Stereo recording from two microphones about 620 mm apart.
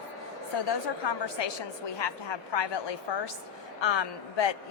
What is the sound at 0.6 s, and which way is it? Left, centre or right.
A woman's voice, left.